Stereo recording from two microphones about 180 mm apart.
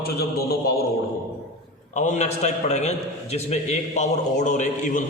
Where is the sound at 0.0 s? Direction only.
60° left (ahead or behind).